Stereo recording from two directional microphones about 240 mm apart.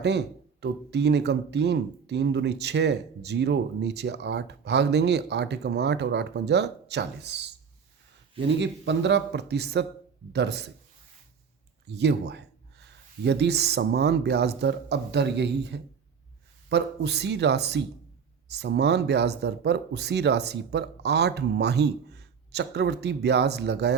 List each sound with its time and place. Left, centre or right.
0.0 s speech: right
8.4 s speech: right
11.9 s speech: right